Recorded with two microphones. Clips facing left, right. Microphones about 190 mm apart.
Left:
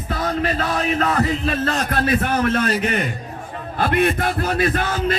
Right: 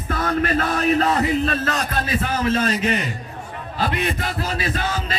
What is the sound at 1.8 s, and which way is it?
A man's voice, 60° left (ahead or behind).